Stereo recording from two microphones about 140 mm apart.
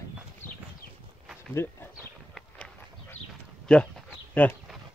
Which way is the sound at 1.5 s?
15° left (ahead or behind).